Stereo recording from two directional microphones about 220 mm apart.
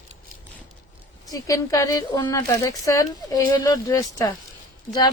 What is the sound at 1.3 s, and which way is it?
Speech, 15° left (ahead or behind).